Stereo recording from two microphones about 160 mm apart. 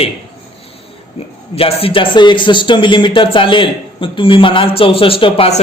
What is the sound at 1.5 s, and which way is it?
Speech, 35° left (ahead or behind).